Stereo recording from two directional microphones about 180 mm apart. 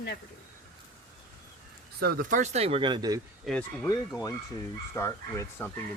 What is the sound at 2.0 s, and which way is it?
Speech, 55° right (ahead or behind).